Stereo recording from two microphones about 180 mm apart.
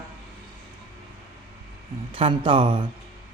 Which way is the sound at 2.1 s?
30° right (ahead or behind).